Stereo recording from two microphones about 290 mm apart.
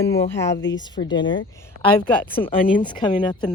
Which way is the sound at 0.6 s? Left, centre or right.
Left.